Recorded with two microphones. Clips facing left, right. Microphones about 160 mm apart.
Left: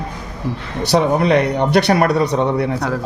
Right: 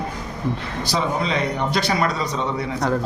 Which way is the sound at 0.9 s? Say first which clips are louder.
Left 9 dB; 65° left (ahead or behind).